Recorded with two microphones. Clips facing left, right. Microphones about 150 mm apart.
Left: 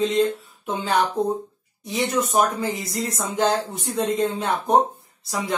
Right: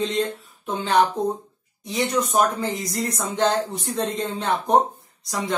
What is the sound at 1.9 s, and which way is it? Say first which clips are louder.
Speech: even; centre (ahead or behind).